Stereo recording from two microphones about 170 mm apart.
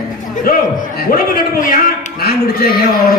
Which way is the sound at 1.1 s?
50° left (ahead or behind).